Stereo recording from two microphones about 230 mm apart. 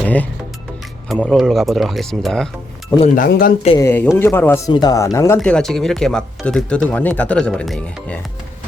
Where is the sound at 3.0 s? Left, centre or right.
Left.